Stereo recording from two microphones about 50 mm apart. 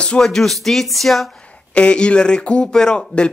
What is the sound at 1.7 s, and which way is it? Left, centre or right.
Speech, left.